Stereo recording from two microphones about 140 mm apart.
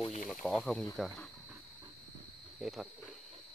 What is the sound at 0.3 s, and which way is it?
Speech, 5° left (ahead or behind).